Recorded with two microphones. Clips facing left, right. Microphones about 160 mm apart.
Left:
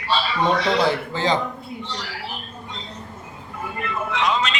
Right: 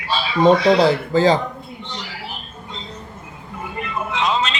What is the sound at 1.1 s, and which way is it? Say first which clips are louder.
Speech: right 7 dB; 35° right (ahead or behind).